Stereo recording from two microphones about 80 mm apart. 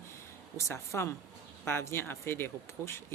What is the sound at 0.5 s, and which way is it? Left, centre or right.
Speech, left.